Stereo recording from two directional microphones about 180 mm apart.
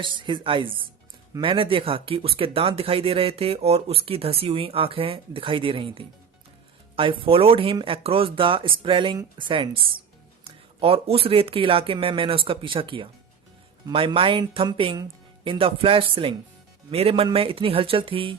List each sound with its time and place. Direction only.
0.0 s speech: 25° right (ahead or behind)